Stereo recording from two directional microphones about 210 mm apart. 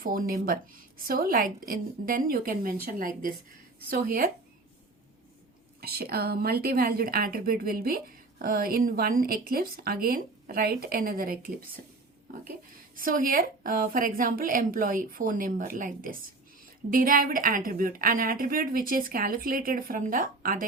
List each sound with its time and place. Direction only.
0.0 s a woman's voice: 40° right (ahead or behind)
5.8 s a woman's voice: 45° right (ahead or behind)
13.0 s a woman's voice: 40° right (ahead or behind)